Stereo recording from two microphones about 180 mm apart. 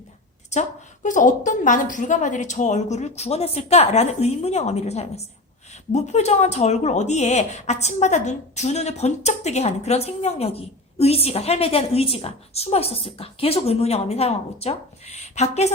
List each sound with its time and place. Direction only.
0.5 s a woman's voice: 40° left (ahead or behind)